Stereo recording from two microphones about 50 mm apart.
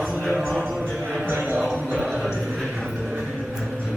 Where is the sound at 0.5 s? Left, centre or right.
Centre.